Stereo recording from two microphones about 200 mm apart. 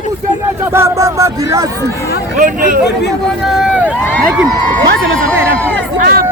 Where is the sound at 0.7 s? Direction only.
15° right (ahead or behind).